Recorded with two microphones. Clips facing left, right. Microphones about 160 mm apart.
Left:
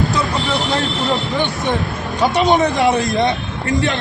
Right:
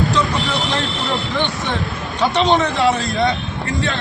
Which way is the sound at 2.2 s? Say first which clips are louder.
Left 2 dB; 10° left (ahead or behind).